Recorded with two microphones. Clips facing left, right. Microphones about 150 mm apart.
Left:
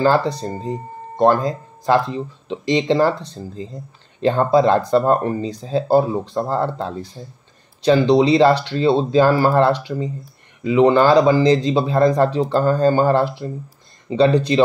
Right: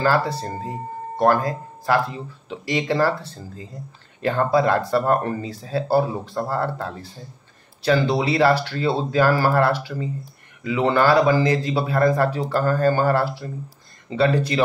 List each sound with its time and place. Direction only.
0.0 s speech: 20° left (ahead or behind)